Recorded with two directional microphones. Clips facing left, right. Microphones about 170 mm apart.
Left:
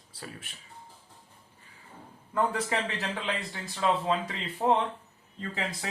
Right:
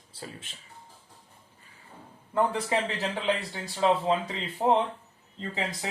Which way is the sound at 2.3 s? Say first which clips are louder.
Right 2 dB; 25° right (ahead or behind).